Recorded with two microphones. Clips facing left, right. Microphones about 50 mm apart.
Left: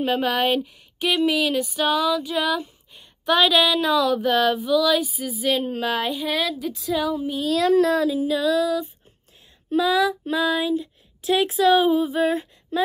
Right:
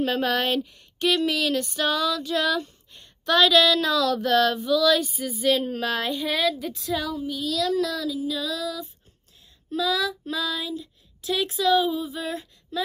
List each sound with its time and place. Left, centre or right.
0.0 s speech: centre
7.0 s child singing: left